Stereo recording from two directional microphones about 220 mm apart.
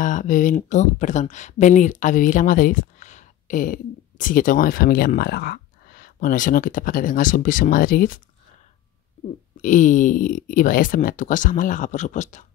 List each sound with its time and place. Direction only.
0.0 s speech: 35° left (ahead or behind)
9.6 s speech: 35° left (ahead or behind)